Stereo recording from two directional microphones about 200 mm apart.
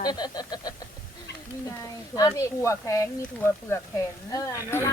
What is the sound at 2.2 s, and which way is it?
Speech, 15° left (ahead or behind).